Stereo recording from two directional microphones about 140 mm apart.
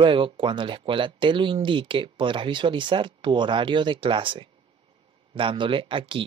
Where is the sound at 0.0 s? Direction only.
35° right (ahead or behind).